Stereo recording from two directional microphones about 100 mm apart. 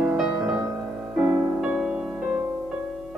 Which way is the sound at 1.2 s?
10° right (ahead or behind).